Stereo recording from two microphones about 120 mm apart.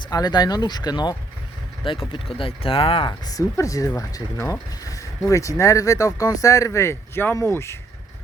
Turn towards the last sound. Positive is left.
turn(degrees=20)  # may be behind; listen again after turning